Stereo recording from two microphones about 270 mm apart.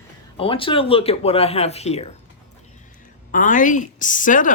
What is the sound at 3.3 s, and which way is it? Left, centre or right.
Speech, left.